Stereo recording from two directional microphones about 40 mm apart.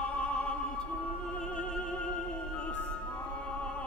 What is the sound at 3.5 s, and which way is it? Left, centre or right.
Music, left.